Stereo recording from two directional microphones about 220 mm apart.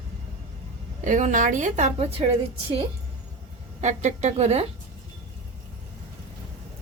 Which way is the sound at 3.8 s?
30° right (ahead or behind).